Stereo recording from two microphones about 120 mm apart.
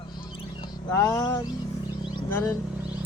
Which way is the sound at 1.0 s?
30° left (ahead or behind).